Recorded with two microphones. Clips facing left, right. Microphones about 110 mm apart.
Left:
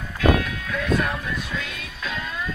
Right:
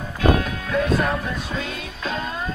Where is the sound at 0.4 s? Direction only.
35° right (ahead or behind).